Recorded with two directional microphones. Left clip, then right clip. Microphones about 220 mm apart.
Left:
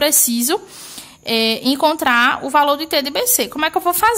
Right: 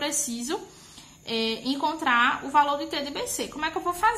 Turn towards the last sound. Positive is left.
turn(degrees=50)  # may be behind; listen again after turning